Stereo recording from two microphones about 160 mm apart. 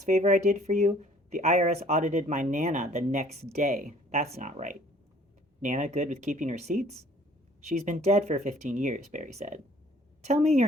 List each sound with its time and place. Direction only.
0.0 s speech: 45° right (ahead or behind)